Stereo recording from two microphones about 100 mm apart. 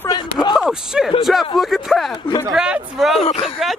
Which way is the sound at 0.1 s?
45° left (ahead or behind).